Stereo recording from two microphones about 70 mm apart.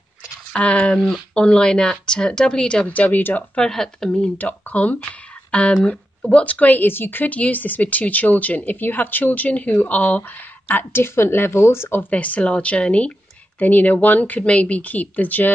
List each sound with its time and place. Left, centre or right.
0.5 s speech: centre
3.5 s speech: centre
4.4 s speech: left
12.1 s speech: left